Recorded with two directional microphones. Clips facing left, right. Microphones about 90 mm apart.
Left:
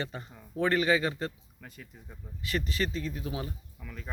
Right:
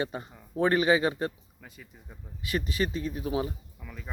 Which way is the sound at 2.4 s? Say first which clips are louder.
Right 2 dB; 15° right (ahead or behind).